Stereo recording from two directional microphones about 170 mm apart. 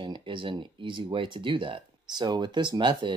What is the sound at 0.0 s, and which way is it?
Speech, 30° right (ahead or behind).